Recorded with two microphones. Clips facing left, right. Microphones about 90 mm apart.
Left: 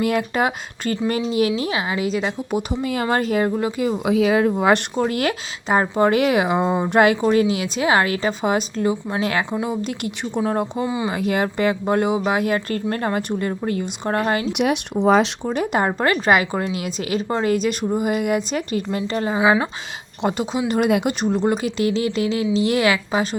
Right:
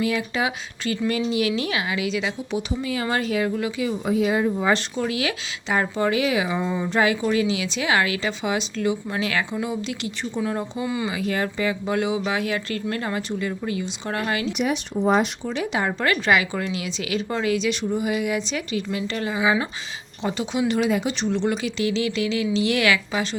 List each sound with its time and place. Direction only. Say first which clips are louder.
0.0 s speech: left 4 dB; 50° left (ahead or behind)
4.0 s speech: left 4 dB; 90° left; by 4.8 s 70° left (ahead or behind)
4.9 s speech: left 4 dB; 45° left (ahead or behind)
6.1 s speech: left 5 dB; 55° left (ahead or behind)
7.2 s speech: left 4 dB; 45° left (ahead or behind)
8.8 s speech: left 3 dB; 30° left (ahead or behind)
9.2 s speech: left 4 dB; 45° left (ahead or behind)
10.8 s speech: left 3 dB; 20° left (ahead or behind)
11.1 s speech: left 4 dB; 55° left (ahead or behind)
14.5 s speech: left 4 dB; 65° left (ahead or behind); by 15.3 s 90° left
15.4 s speech: left 4 dB; 45° left (ahead or behind)
20.2 s speech: left 5 dB; 55° left (ahead or behind)
20.7 s speech: left 4 dB; 45° left (ahead or behind)